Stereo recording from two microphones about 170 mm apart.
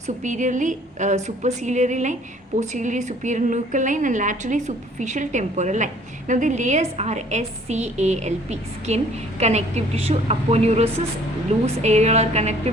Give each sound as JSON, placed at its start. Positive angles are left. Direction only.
{"t": 0.2, "sound": "a woman's voice", "side_deg": -45}